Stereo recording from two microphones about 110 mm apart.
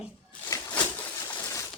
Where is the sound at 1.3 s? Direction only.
25° left (ahead or behind).